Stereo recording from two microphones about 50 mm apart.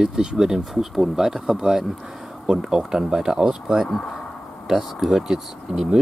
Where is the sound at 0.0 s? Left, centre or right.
Centre.